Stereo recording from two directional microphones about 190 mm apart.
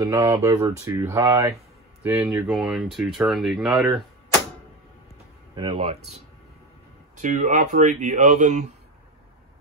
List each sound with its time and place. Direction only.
0.0 s speech: 15° right (ahead or behind)
5.5 s speech: 25° right (ahead or behind)